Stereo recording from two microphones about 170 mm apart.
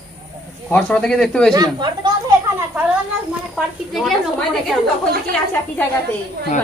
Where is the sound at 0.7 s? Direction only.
5° left (ahead or behind).